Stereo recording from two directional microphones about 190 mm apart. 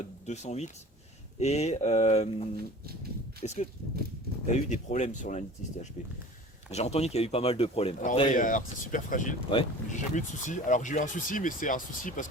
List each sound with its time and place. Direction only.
0.0 s a sound: 35° left (ahead or behind)
1.4 s speech: 35° left (ahead or behind)
6.7 s speech: 35° left (ahead or behind)
8.3 s speech: 45° left (ahead or behind)
9.5 s speech: 25° left (ahead or behind)
10.2 s speech: 40° left (ahead or behind)